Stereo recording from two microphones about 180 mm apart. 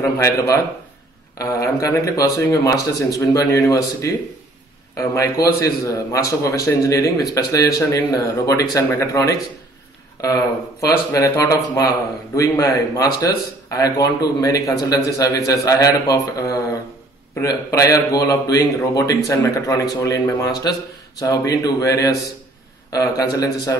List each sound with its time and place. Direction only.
0.0 s a man's voice: 15° left (ahead or behind)